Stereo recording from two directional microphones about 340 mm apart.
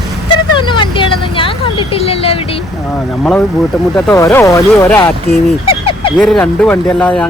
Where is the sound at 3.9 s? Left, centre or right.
Centre.